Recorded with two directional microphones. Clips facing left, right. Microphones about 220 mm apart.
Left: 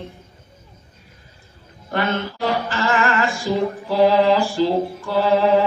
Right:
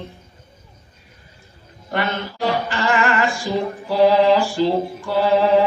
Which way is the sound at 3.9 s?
15° right (ahead or behind).